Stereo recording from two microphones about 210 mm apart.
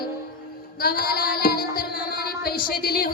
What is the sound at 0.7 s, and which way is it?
Child singing, 45° left (ahead or behind).